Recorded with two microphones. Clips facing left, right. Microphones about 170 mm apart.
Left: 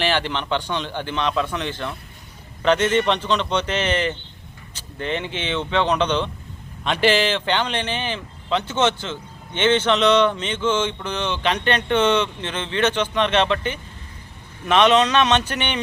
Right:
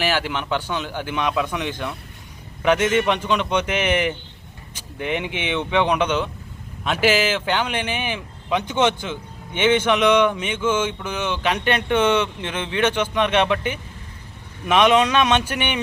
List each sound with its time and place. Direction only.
0.0 s speech: 5° right (ahead or behind)